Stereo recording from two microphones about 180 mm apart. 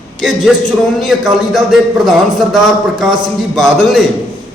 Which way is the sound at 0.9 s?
Centre (ahead or behind).